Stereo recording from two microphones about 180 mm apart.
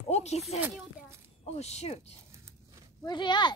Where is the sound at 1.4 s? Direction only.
35° left (ahead or behind).